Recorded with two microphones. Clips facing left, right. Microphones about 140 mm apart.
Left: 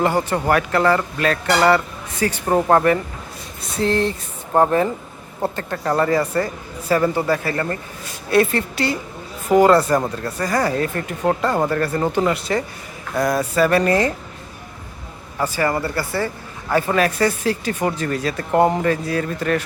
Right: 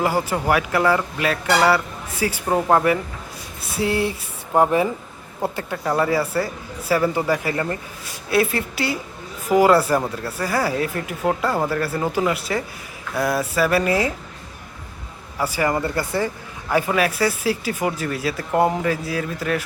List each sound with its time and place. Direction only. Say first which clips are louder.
0.0 s speech: left 2 dB; 5° right (ahead or behind)
15.4 s speech: left 1 dB; 10° right (ahead or behind)